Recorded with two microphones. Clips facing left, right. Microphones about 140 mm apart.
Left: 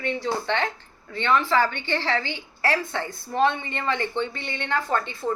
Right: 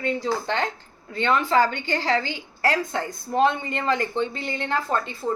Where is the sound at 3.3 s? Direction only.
35° right (ahead or behind).